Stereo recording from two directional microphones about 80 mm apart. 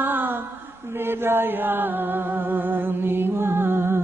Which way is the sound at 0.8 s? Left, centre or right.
Right.